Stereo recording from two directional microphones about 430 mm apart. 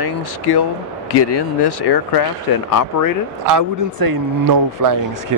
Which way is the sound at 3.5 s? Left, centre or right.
Right.